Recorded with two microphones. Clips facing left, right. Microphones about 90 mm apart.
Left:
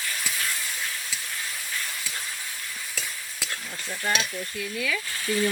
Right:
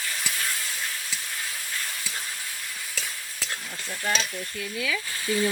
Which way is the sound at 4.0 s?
10° left (ahead or behind).